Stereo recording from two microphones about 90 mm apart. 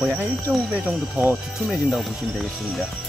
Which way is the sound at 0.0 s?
5° right (ahead or behind).